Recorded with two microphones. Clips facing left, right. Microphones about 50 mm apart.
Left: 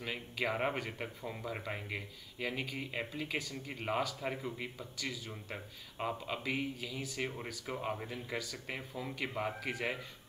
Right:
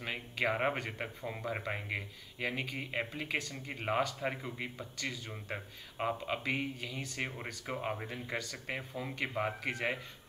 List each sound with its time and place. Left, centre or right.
0.0 s speech: centre